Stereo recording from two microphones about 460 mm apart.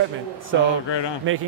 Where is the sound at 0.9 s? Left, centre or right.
Left.